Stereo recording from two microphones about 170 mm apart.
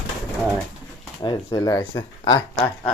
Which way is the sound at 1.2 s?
25° left (ahead or behind).